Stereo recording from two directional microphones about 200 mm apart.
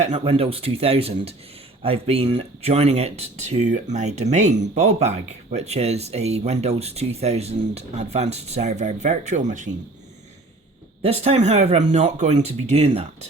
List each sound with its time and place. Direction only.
0.0 s speech: 30° right (ahead or behind)
11.0 s speech: 30° right (ahead or behind)